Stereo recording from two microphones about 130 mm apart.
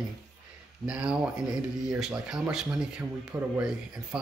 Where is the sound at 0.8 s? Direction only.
10° right (ahead or behind).